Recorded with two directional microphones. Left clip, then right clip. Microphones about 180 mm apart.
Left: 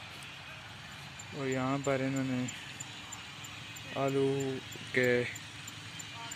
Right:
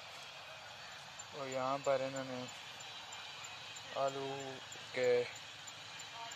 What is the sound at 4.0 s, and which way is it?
Speech, 25° left (ahead or behind).